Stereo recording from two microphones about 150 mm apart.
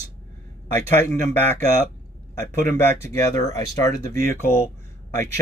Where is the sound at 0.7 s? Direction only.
15° left (ahead or behind).